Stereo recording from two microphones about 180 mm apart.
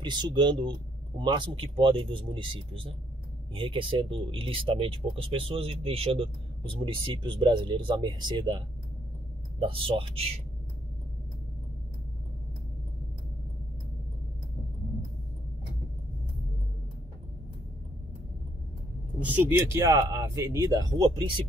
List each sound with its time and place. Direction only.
0.0 s speech: 25° right (ahead or behind)
19.2 s speech: 10° right (ahead or behind)